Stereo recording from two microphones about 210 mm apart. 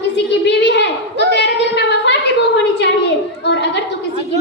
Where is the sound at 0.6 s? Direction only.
55° left (ahead or behind).